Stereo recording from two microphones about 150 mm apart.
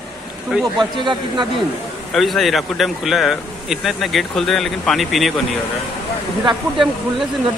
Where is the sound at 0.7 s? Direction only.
30° right (ahead or behind).